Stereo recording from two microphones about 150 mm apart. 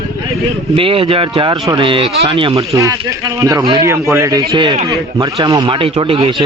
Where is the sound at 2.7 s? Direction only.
20° right (ahead or behind).